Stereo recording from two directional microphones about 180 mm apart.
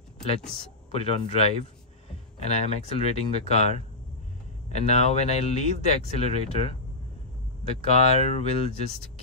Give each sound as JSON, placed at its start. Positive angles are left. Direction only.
{"t": 0.9, "sound": "speech", "side_deg": 35}
{"t": 7.8, "sound": "speech", "side_deg": 35}